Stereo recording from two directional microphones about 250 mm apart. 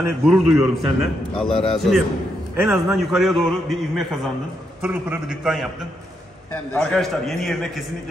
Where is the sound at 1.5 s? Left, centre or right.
Left.